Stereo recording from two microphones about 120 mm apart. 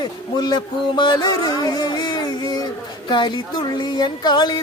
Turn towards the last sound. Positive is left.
turn(degrees=40)  # may be behind; listen again after turning